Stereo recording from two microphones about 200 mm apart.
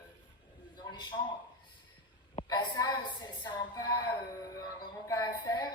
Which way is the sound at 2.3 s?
20° left (ahead or behind).